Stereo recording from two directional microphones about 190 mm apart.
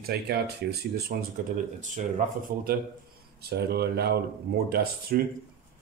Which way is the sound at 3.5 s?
55° right (ahead or behind).